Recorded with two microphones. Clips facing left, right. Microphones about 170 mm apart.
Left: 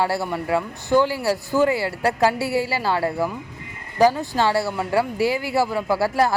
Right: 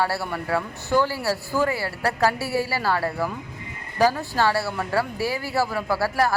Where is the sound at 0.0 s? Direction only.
15° left (ahead or behind).